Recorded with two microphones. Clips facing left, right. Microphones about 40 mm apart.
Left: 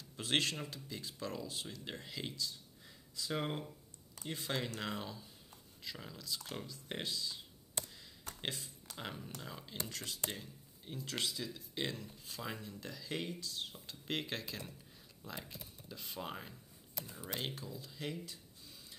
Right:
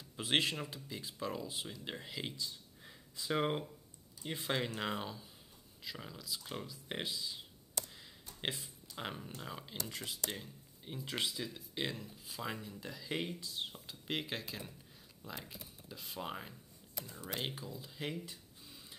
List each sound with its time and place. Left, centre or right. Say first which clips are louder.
0.0 s speech: right 2 dB; centre
5.8 s speech: right 1 dB; centre
7.8 s tick-tock: even; left
8.4 s speech: right 3 dB; centre
13.7 s speech: left 1 dB; centre
17.4 s speech: right 1 dB; centre